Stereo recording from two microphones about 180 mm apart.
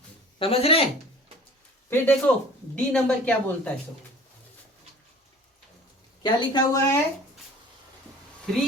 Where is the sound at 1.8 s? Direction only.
10° left (ahead or behind).